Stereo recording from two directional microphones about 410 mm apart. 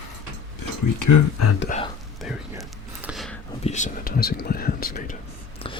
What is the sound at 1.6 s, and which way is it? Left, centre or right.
Speech, centre.